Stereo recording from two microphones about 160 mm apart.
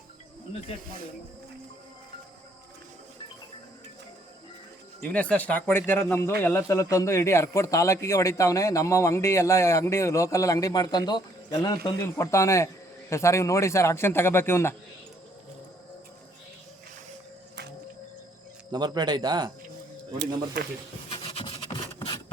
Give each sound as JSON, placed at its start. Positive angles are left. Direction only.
{"t": 5.0, "sound": "a man's voice", "side_deg": 10}
{"t": 18.7, "sound": "speech", "side_deg": -25}
{"t": 20.1, "sound": "speech", "side_deg": -90}
{"t": 21.1, "sound": "rub", "side_deg": 35}